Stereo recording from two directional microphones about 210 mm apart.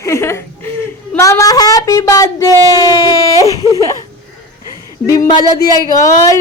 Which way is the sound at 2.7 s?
20° left (ahead or behind).